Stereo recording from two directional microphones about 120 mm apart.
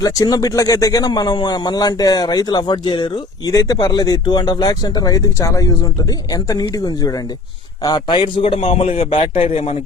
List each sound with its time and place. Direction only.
0.0 s a man's voice: 30° left (ahead or behind); by 9.7 s 55° left (ahead or behind)